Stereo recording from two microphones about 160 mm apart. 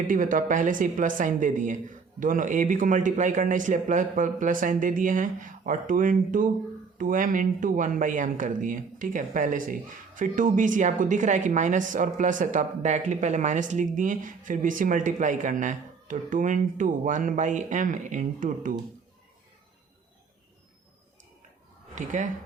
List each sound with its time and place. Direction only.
0.1 s speech: 55° right (ahead or behind)
21.9 s speech: 50° right (ahead or behind)